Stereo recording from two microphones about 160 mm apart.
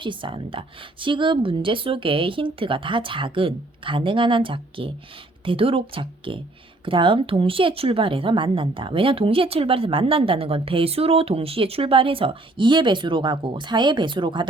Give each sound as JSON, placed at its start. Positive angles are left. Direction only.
{"t": 0.0, "sound": "a woman's voice", "side_deg": -30}